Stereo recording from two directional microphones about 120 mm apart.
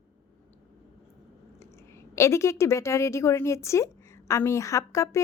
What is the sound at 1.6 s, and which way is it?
A woman's voice, 25° left (ahead or behind).